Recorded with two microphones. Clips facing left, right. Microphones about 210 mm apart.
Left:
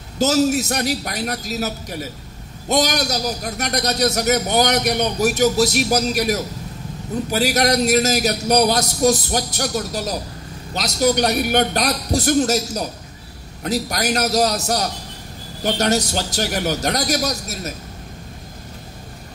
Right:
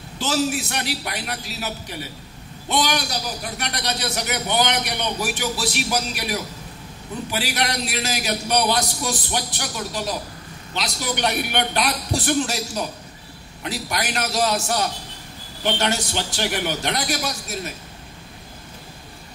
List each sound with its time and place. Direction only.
0.2 s a man's voice: 40° left (ahead or behind)